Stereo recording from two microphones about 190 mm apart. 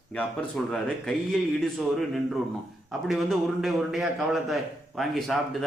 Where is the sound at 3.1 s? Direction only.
Centre (ahead or behind).